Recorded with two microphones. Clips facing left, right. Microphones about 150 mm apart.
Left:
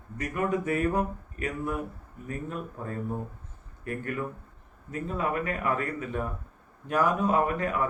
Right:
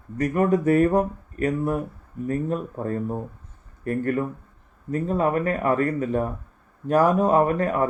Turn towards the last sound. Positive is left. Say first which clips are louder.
# right 6 dB
turn(degrees=-40)  # may be behind; listen again after turning